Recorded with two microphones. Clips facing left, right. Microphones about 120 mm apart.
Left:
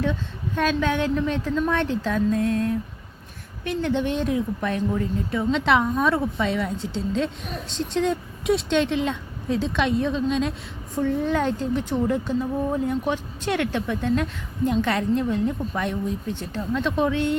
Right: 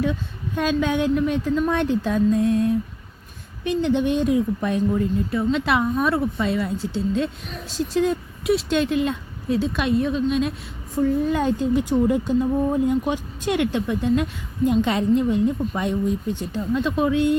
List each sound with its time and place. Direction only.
0.0 s speech: 10° right (ahead or behind)
5.3 s speech: 5° right (ahead or behind)